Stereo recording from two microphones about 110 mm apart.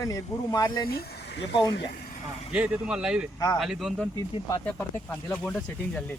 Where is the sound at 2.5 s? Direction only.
10° right (ahead or behind).